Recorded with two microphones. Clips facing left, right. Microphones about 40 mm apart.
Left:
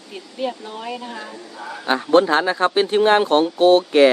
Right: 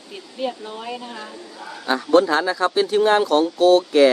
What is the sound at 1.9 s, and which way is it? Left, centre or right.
Speech, left.